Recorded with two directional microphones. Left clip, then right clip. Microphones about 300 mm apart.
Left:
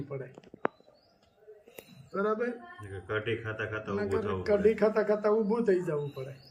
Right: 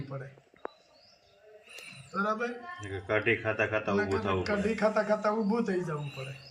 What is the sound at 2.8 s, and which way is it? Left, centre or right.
Speech, right.